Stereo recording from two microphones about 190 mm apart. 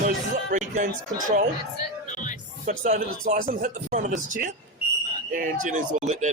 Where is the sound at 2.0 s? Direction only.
40° left (ahead or behind).